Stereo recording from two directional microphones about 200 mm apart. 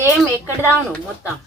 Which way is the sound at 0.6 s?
15° left (ahead or behind).